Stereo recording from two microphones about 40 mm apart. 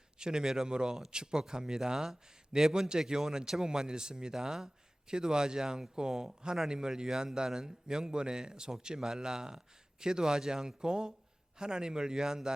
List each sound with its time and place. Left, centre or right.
0.2 s a man's voice: centre